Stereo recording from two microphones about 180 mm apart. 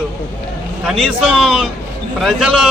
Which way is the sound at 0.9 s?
5° right (ahead or behind).